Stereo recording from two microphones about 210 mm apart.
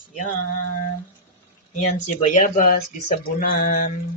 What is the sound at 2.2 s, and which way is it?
Speech, 35° left (ahead or behind).